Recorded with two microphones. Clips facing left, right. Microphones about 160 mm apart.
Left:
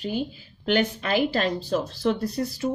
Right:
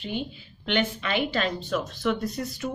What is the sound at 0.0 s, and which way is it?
Speech, 40° left (ahead or behind).